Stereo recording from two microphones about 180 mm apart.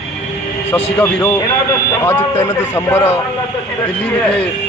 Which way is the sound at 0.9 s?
10° left (ahead or behind).